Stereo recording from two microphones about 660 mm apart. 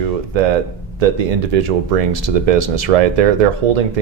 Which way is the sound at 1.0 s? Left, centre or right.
Right.